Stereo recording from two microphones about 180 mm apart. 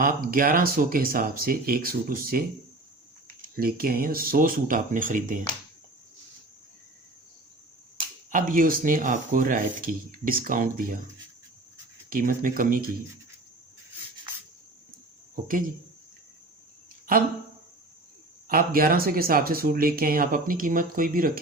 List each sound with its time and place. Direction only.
0.0 s speech: 50° right (ahead or behind)
3.6 s speech: 55° right (ahead or behind)
7.9 s speech: 50° right (ahead or behind)
12.1 s speech: 50° right (ahead or behind)
18.4 s speech: 55° right (ahead or behind)